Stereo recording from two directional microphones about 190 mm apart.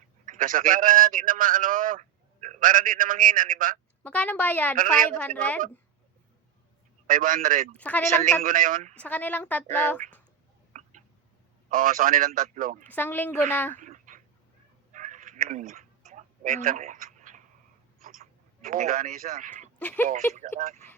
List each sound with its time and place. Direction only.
0.3 s a man's voice: 45° right (ahead or behind)
4.0 s a woman's voice: 5° left (ahead or behind)
7.1 s a man's voice: 45° right (ahead or behind)
7.8 s a woman's voice: 5° left (ahead or behind)
8.4 s a man's voice: 45° right (ahead or behind)
9.0 s a woman's voice: 5° left (ahead or behind)
10.7 s a sound: 40° right (ahead or behind)
11.7 s a man's voice: 45° right (ahead or behind)
12.8 s a woman's voice: 10° left (ahead or behind)
13.7 s a sound: 40° right (ahead or behind)
14.9 s cat: 45° right (ahead or behind)
18.0 s a sound: 45° right (ahead or behind)
19.8 s a woman's voice: 10° left (ahead or behind)